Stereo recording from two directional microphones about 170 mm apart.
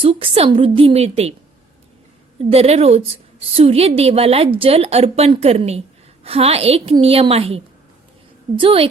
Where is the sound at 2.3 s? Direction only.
35° right (ahead or behind).